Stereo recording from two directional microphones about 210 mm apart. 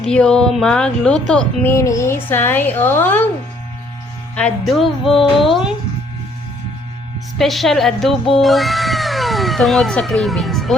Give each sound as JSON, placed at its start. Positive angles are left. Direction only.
{"t": 0.0, "sound": "a woman's voice", "side_deg": 5}
{"t": 4.4, "sound": "a woman's voice", "side_deg": 5}
{"t": 7.3, "sound": "speech", "side_deg": 0}